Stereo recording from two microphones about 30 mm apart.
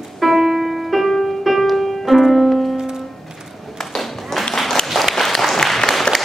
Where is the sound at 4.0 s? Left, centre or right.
Centre.